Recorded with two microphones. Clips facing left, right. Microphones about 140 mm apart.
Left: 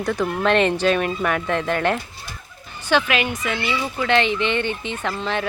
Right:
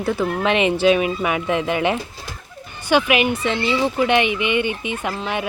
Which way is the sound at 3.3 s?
30° right (ahead or behind).